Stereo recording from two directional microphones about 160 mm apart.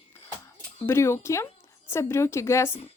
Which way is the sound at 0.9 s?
15° left (ahead or behind).